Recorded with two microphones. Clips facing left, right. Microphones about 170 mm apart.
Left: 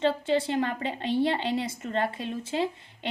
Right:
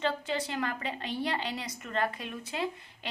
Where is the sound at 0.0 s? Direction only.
25° left (ahead or behind).